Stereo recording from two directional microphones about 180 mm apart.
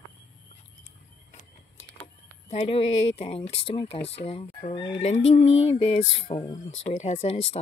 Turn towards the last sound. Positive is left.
turn(degrees=35)  # may be behind; listen again after turning